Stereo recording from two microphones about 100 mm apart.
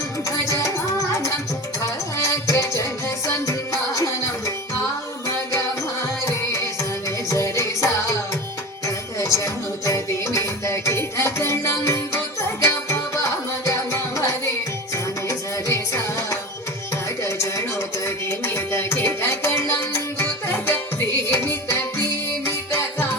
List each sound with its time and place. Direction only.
0.3 s music: 30° left (ahead or behind)
2.1 s music: 30° left (ahead or behind)
9.1 s music: 30° left (ahead or behind)